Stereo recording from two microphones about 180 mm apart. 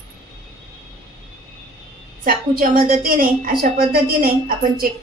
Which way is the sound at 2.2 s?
55° right (ahead or behind).